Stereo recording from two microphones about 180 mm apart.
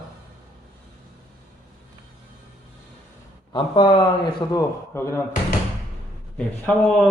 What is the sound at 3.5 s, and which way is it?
Speech, 30° left (ahead or behind).